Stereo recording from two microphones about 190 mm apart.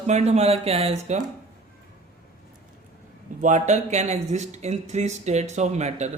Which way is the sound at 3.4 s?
40° right (ahead or behind).